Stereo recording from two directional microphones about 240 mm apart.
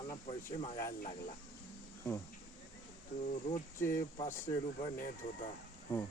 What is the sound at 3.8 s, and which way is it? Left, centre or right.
Speech, centre.